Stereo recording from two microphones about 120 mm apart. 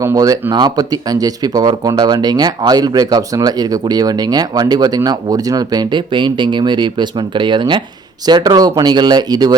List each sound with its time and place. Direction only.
0.0 s speech: 30° right (ahead or behind)